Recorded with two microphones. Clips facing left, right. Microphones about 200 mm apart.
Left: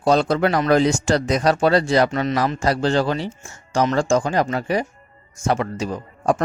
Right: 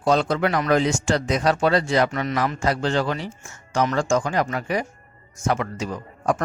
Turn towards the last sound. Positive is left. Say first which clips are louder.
# left 3 dB
turn(degrees=30)  # may be behind; listen again after turning